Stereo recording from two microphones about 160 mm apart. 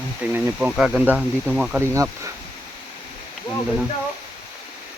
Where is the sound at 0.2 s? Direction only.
10° right (ahead or behind).